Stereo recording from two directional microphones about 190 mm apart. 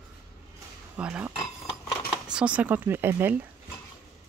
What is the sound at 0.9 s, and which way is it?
Speech, 5° right (ahead or behind).